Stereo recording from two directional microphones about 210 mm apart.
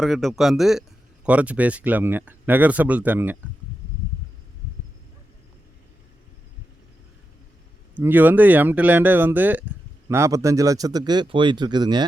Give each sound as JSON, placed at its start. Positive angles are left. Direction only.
{"t": 0.0, "sound": "speech", "side_deg": 0}
{"t": 7.9, "sound": "speech", "side_deg": -10}